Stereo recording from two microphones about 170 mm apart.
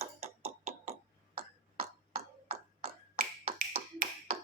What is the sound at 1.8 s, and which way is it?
Finger snapping, 40° right (ahead or behind).